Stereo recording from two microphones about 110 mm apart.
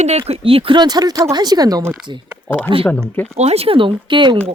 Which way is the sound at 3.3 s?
75° right (ahead or behind).